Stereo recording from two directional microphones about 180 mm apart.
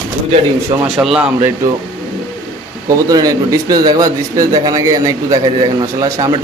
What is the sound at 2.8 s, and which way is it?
A man's voice, 20° right (ahead or behind).